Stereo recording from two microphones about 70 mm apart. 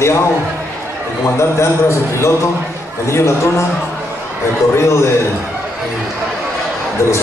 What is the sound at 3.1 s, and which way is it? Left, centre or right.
Speech, left.